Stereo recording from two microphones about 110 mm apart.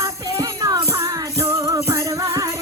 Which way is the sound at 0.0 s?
30° right (ahead or behind).